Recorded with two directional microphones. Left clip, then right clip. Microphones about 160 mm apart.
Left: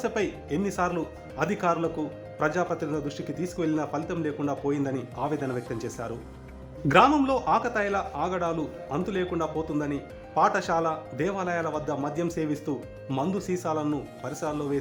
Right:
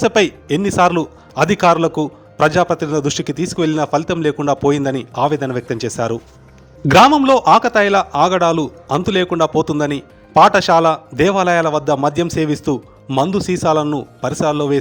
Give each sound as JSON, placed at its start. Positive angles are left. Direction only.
{"t": 0.0, "sound": "a man's voice", "side_deg": -50}
{"t": 3.0, "sound": "a man's voice", "side_deg": -65}